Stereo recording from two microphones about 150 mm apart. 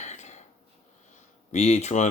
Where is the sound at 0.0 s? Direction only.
50° left (ahead or behind).